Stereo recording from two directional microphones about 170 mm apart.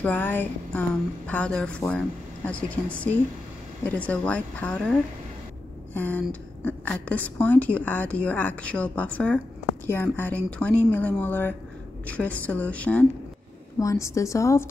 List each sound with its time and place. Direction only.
0.0 s speech: 10° left (ahead or behind)
3.8 s speech: 10° left (ahead or behind)
5.9 s speech: 10° left (ahead or behind)